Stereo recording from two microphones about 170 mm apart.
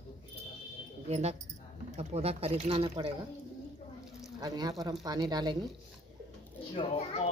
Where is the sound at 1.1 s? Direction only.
40° right (ahead or behind).